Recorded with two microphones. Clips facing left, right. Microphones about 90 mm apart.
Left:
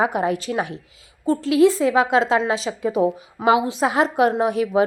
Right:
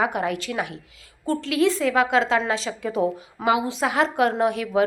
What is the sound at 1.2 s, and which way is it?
A woman's voice, 10° left (ahead or behind).